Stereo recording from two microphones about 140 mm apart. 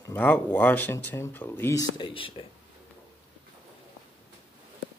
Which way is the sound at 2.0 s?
40° left (ahead or behind).